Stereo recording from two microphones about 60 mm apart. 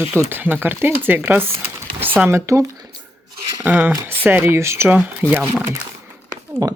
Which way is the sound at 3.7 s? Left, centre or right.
Right.